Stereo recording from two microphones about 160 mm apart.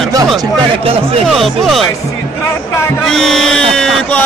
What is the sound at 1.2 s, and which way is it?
Speech, centre (ahead or behind).